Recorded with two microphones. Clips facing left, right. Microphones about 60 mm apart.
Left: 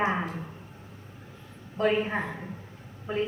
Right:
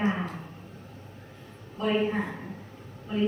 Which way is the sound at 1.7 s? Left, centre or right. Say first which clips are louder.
Left 1 dB; left.